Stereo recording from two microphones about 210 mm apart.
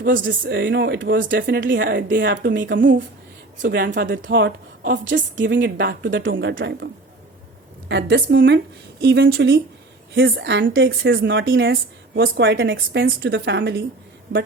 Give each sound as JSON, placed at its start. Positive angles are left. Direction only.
{"t": 0.0, "sound": "a woman's voice", "side_deg": -60}